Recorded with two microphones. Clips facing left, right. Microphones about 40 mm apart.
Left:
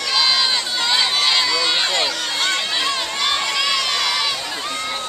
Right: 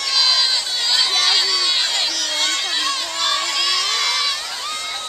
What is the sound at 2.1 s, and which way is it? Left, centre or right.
Crowd, left.